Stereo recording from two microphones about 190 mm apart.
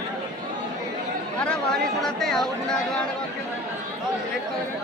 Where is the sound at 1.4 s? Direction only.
5° left (ahead or behind).